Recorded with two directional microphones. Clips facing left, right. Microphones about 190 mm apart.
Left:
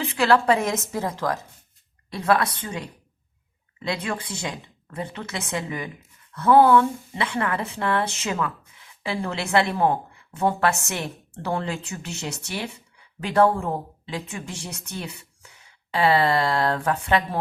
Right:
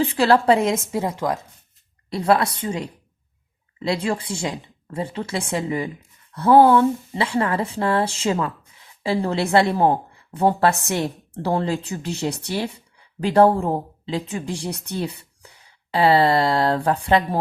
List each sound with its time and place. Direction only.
0.0 s a woman's voice: 35° right (ahead or behind)
0.8 s a woman's voice: 15° right (ahead or behind)
2.0 s a woman's voice: 30° right (ahead or behind)